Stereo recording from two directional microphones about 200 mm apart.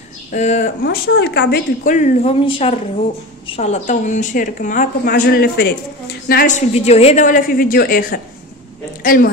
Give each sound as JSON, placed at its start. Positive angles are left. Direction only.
{"t": 0.3, "sound": "a woman's voice", "side_deg": 35}
{"t": 0.8, "sound": "speech", "side_deg": 55}
{"t": 2.0, "sound": "a woman's voice", "side_deg": 30}